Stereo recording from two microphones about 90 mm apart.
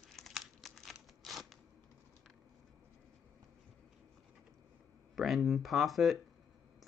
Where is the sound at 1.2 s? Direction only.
Centre (ahead or behind).